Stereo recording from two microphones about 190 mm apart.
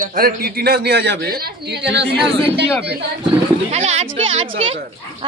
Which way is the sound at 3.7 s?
35° right (ahead or behind).